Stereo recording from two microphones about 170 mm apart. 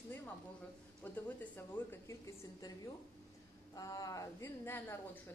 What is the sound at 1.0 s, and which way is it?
Speech, 10° left (ahead or behind).